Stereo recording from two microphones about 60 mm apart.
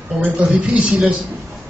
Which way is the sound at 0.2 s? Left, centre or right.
Right.